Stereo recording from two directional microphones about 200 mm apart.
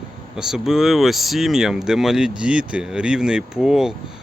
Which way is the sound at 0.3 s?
5° right (ahead or behind).